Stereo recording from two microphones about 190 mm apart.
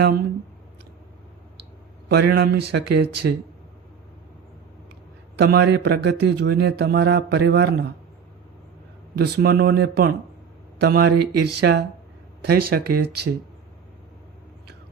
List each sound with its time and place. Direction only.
2.1 s speech: 55° right (ahead or behind)
5.4 s speech: 60° right (ahead or behind)
9.1 s speech: 55° right (ahead or behind)